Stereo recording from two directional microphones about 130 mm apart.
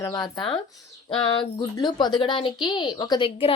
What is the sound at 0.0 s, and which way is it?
A woman's voice, 30° left (ahead or behind).